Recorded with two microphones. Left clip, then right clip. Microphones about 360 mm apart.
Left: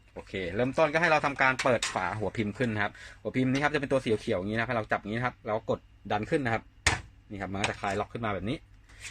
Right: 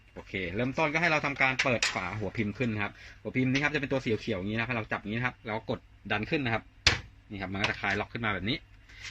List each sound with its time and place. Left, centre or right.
0.3 s speech: left; by 8.6 s centre